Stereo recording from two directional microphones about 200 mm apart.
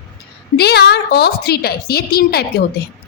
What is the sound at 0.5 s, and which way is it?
A woman's voice, 55° left (ahead or behind).